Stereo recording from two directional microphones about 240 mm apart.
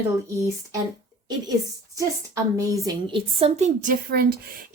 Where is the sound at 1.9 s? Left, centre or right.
Centre.